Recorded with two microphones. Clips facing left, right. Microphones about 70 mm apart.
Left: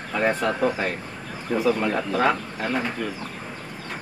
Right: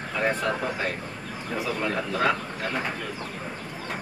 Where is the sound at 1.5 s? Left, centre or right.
Left.